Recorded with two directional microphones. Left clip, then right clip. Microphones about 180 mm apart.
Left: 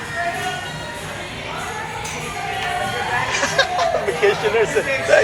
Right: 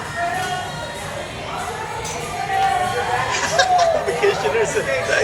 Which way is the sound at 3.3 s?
5° right (ahead or behind).